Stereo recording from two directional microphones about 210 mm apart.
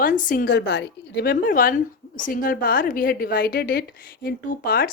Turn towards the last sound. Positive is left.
turn(degrees=45)  # may be behind; listen again after turning